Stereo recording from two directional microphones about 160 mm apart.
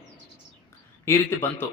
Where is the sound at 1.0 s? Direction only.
15° left (ahead or behind).